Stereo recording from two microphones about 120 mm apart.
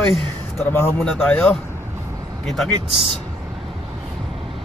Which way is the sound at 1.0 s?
5° left (ahead or behind).